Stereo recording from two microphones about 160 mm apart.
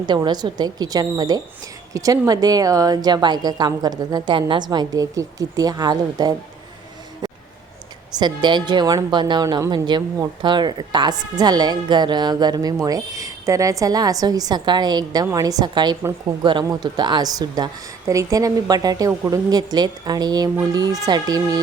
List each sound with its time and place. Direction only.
0.0 s a woman's voice: 25° right (ahead or behind)
8.1 s a woman's voice: 30° right (ahead or behind)